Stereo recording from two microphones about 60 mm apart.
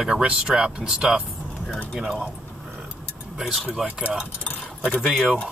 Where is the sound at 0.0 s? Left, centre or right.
Centre.